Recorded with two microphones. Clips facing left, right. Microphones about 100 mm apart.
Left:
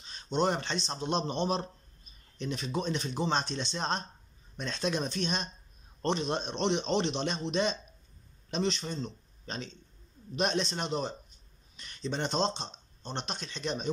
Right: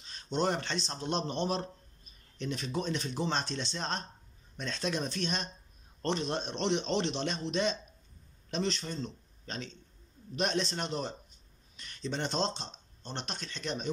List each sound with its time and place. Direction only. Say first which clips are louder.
0.3 s a man's voice: left 2 dB; 15° left (ahead or behind)
10.7 s speech: left 2 dB; 15° left (ahead or behind)